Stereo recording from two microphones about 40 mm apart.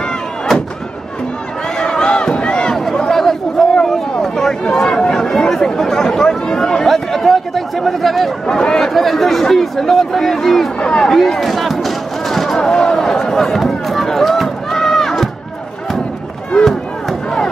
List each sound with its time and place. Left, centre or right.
1.8 s crowd: left
2.7 s a sound: centre
3.2 s chatter: centre
4.2 s a sound: centre
6.9 s speech: centre
8.5 s speech: centre
8.8 s speech: centre
10.8 s speech: centre
11.1 s a sound: centre
16.5 s chop: left